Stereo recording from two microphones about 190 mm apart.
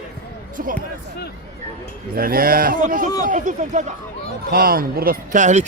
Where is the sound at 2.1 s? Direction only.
50° right (ahead or behind).